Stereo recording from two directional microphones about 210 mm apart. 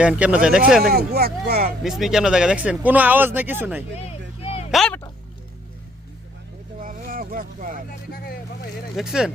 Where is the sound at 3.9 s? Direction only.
30° left (ahead or behind).